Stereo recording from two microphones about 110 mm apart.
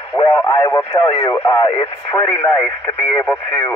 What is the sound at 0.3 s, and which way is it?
Speech, 20° left (ahead or behind).